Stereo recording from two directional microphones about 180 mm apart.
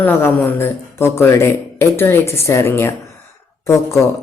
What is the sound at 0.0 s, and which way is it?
Speech, 10° left (ahead or behind).